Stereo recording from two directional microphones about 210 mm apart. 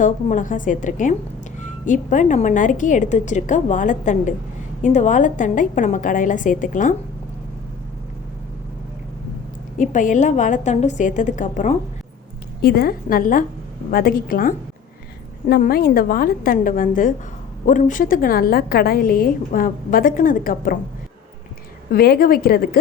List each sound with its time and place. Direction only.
0.0 s a woman's voice: 40° left (ahead or behind)
9.7 s a woman's voice: 40° left (ahead or behind)
21.9 s a woman's voice: 50° left (ahead or behind)